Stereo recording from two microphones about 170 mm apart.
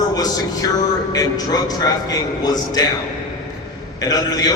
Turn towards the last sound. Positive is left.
turn(degrees=20)  # may be behind; listen again after turning